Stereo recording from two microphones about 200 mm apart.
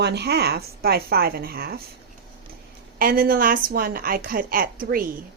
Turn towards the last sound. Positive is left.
turn(degrees=-45)  # may be behind; listen again after turning